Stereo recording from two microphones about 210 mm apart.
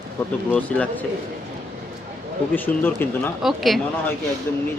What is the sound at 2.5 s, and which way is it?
A woman's voice, 10° left (ahead or behind).